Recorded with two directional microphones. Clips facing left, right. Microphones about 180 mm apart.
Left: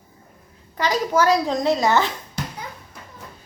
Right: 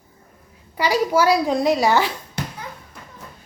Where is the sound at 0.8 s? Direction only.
10° right (ahead or behind).